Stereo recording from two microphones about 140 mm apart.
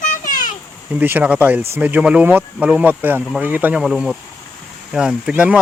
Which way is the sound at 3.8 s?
Centre (ahead or behind).